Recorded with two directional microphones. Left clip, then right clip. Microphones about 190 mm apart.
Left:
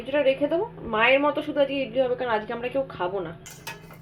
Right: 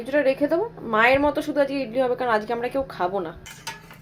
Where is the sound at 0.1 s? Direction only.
20° right (ahead or behind).